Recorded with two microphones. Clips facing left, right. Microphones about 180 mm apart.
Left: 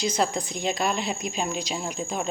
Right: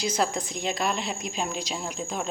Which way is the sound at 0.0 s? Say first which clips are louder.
Left 1 dB; 5° right (ahead or behind).